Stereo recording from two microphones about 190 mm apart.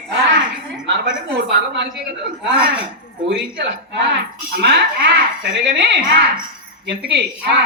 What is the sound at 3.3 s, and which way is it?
A woman's voice, 65° right (ahead or behind).